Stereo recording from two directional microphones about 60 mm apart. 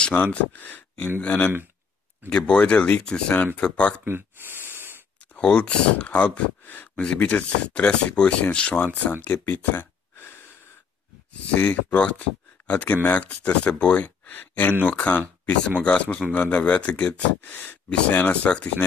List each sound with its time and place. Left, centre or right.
0.0 s speech: left
4.0 s gasp: right
5.4 s speech: centre
6.6 s a sound: left
7.0 s speech: left
9.1 s speech: left
11.5 s speech: left
17.4 s speech: left
17.8 s speech: centre